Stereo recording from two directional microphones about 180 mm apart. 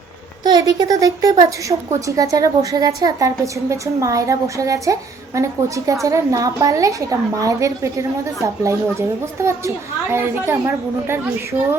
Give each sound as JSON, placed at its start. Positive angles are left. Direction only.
{"t": 0.4, "sound": "a woman's voice", "side_deg": -20}